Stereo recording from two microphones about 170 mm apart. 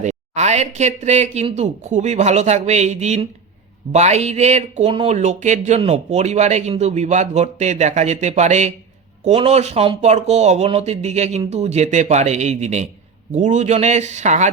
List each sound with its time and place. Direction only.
0.0 s speech: 45° right (ahead or behind)